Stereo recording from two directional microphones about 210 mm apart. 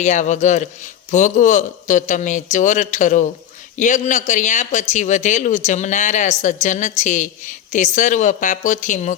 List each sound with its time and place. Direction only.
0.0 s speech: 35° left (ahead or behind)